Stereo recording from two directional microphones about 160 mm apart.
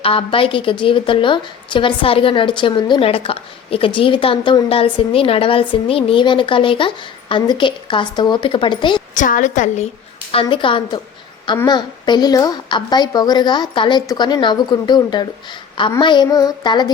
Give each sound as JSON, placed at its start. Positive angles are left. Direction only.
{"t": 0.0, "sound": "a woman's voice", "side_deg": 35}
{"t": 9.1, "sound": "a woman's voice", "side_deg": 55}
{"t": 10.4, "sound": "a woman's voice", "side_deg": 30}